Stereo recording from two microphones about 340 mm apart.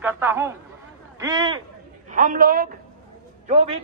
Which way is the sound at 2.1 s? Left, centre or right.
Right.